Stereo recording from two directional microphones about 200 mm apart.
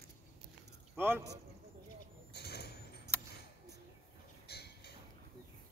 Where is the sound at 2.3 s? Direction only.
55° left (ahead or behind).